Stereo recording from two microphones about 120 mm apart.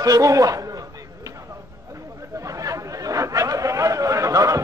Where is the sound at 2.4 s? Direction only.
30° right (ahead or behind).